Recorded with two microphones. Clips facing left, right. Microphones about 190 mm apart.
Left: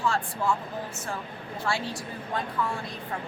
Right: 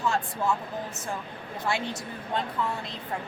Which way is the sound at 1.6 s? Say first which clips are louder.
Right 1 dB; 20° right (ahead or behind).